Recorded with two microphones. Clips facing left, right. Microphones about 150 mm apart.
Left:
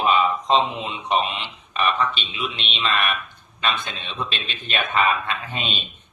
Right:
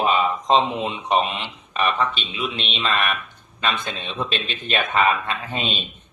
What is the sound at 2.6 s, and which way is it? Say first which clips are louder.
Speech: even; 35° right (ahead or behind).